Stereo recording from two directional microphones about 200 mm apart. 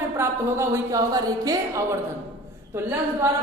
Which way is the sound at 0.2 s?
10° right (ahead or behind).